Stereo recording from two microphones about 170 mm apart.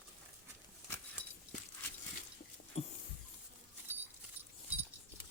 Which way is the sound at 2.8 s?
35° left (ahead or behind).